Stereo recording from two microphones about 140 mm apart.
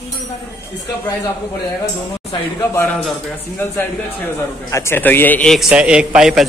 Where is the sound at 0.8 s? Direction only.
20° left (ahead or behind).